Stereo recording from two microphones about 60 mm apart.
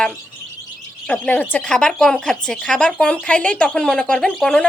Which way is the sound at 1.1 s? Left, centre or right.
Left.